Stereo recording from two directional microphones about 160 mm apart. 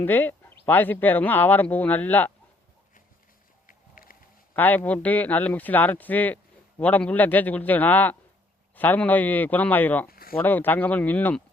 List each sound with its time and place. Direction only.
0.0 s a man's voice: 10° left (ahead or behind)
3.7 s music: 60° left (ahead or behind)
4.5 s a man's voice: 10° left (ahead or behind)
10.1 s a sound: 65° left (ahead or behind)
10.3 s a man's voice: 10° left (ahead or behind)